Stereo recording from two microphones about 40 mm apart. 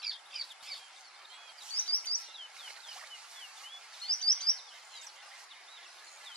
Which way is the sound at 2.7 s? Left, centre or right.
Centre.